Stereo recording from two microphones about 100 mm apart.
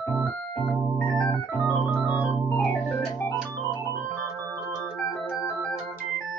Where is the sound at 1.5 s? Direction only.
15° left (ahead or behind).